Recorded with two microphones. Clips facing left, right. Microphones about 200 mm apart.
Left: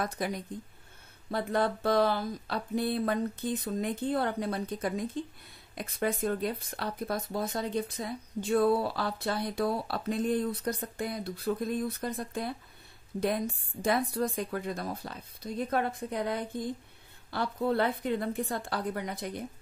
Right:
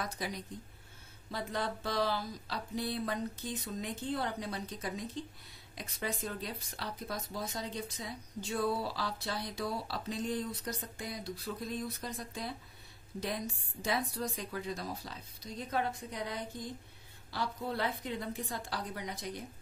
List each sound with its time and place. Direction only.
0.0 s speech: 50° left (ahead or behind)
13.8 s speech: 55° left (ahead or behind)